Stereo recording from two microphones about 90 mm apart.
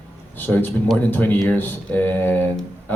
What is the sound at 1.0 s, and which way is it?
Speech, 20° left (ahead or behind).